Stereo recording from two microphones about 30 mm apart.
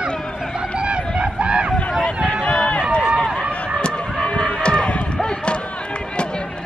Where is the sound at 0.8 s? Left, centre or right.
Right.